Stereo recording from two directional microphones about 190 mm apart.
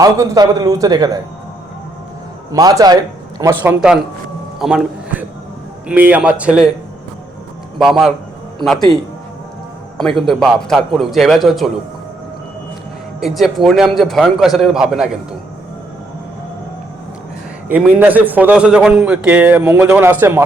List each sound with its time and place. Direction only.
0.0 s a man's voice: 20° right (ahead or behind)
2.5 s a man's voice: 20° right (ahead or behind)
3.6 s a man's voice: 5° right (ahead or behind)
7.8 s a man's voice: centre (ahead or behind)
10.2 s a man's voice: centre (ahead or behind)
13.1 s a man's voice: centre (ahead or behind)
17.7 s a man's voice: 10° right (ahead or behind)